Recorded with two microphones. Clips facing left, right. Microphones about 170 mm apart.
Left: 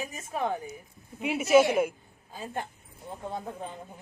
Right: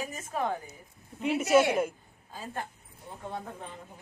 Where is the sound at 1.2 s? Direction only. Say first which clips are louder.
Left 2 dB; 5° left (ahead or behind).